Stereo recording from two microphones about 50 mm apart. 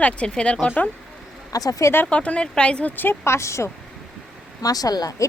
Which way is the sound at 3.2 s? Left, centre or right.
Left.